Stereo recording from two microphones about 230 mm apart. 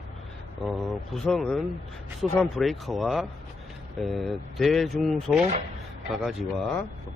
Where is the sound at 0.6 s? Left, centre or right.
Centre.